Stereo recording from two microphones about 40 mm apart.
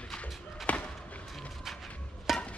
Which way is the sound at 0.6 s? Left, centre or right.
Left.